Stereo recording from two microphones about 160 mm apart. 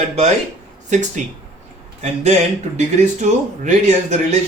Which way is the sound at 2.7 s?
45° right (ahead or behind).